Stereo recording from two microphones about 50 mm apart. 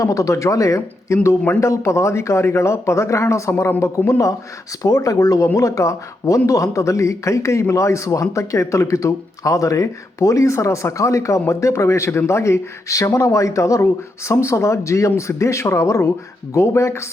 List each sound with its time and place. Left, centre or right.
0.0 s a man's voice: left
16.6 s speech: left